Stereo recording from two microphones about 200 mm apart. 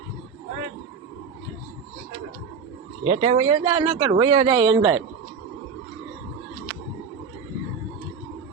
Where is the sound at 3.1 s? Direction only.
30° right (ahead or behind).